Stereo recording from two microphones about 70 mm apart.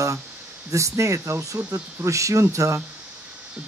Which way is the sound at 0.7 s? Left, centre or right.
Right.